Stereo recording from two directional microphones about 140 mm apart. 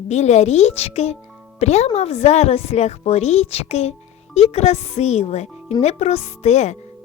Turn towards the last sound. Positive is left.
turn(degrees=50)  # may be behind; listen again after turning